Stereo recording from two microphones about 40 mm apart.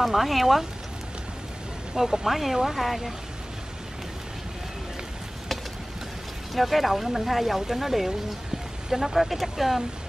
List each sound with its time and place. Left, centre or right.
0.0 s speech: centre
2.0 s speech: centre
6.5 s speech: centre